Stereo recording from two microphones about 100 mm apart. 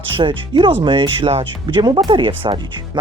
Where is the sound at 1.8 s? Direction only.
50° right (ahead or behind).